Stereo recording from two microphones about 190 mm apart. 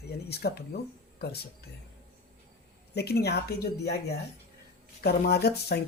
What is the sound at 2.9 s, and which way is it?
A woman's voice, 60° left (ahead or behind).